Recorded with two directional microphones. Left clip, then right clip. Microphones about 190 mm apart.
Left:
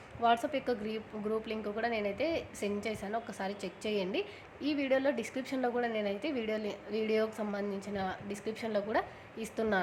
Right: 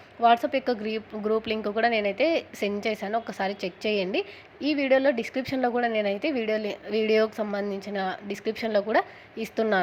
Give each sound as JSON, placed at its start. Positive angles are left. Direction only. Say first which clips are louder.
{"t": 0.2, "sound": "a woman's voice", "louder": "right 9 dB", "side_deg": -30}